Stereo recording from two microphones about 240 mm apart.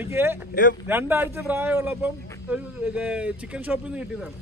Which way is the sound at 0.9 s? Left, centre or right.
Centre.